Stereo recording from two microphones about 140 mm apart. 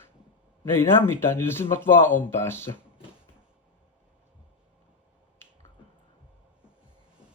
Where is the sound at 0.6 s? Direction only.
15° left (ahead or behind).